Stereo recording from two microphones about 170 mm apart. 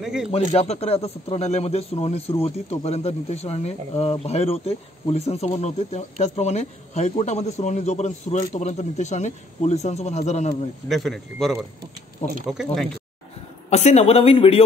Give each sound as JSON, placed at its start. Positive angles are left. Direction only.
{"t": 0.0, "sound": "speech", "side_deg": -5}
{"t": 0.5, "sound": "speech", "side_deg": 40}
{"t": 10.9, "sound": "speech", "side_deg": 0}
{"t": 13.7, "sound": "speech", "side_deg": 40}